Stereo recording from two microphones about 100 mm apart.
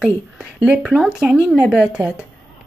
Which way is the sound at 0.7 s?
10° right (ahead or behind).